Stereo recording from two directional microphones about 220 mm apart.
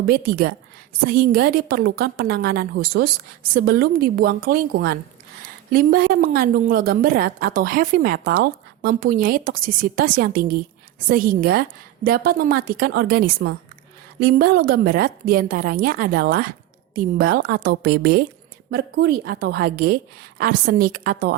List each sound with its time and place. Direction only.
0.0 s a woman's voice: 45° right (ahead or behind)